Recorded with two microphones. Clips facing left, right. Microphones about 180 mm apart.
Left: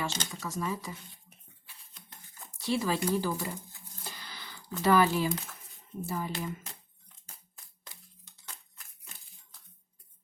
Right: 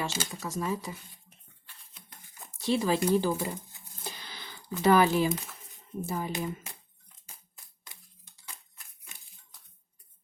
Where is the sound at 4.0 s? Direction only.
20° right (ahead or behind).